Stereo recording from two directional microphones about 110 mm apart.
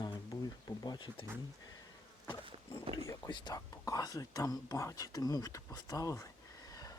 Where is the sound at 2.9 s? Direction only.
40° left (ahead or behind).